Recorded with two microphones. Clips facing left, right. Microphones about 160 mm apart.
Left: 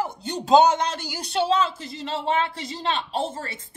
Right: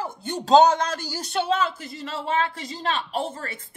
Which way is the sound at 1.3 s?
25° left (ahead or behind).